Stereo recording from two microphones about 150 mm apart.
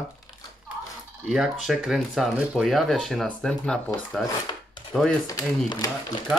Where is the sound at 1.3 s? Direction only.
5° right (ahead or behind).